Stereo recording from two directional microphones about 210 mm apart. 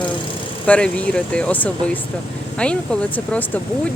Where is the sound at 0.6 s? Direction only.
5° left (ahead or behind).